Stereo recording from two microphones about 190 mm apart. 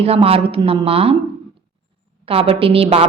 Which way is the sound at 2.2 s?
30° right (ahead or behind).